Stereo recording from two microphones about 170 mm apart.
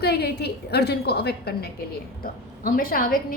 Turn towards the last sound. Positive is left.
turn(degrees=60)  # may be behind; listen again after turning